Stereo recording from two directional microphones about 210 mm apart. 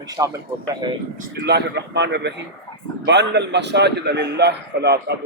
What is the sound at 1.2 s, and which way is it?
A man's voice, 50° right (ahead or behind).